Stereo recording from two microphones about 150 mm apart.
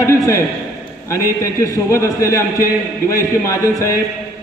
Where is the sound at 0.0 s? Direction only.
20° left (ahead or behind).